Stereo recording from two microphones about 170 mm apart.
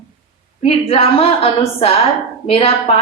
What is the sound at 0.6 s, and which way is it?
A woman's voice, 35° left (ahead or behind).